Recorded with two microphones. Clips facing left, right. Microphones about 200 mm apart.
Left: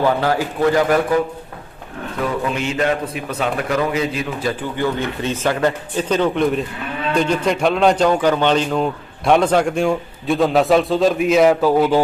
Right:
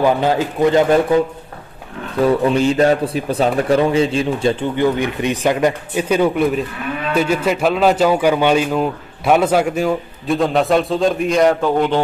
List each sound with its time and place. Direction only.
0.0 s a man's voice: 20° right (ahead or behind)
2.4 s a man's voice: 35° right (ahead or behind); by 12.0 s 5° left (ahead or behind)